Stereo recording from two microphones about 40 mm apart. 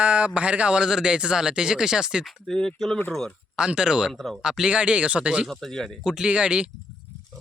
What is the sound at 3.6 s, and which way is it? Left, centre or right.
Speech, right.